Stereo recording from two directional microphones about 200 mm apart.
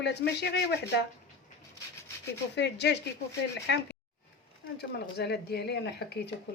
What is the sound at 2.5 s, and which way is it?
A woman's voice, 60° left (ahead or behind).